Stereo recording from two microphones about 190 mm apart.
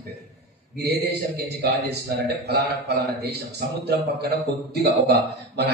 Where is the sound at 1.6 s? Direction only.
60° right (ahead or behind).